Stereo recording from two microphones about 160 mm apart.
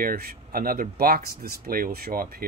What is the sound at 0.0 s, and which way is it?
Speech, 65° right (ahead or behind).